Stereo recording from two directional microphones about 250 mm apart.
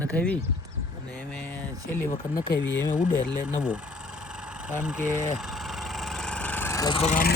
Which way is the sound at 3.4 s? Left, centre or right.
Centre.